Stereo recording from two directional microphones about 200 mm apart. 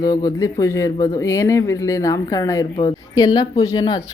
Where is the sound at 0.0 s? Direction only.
20° left (ahead or behind).